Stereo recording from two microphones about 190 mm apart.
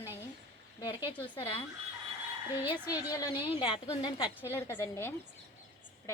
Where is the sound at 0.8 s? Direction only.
20° left (ahead or behind).